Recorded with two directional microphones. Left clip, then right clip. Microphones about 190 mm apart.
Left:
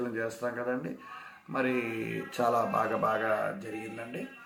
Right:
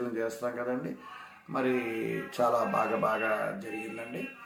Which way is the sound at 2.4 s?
15° left (ahead or behind).